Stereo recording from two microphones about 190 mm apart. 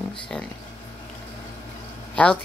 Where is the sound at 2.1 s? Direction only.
5° left (ahead or behind).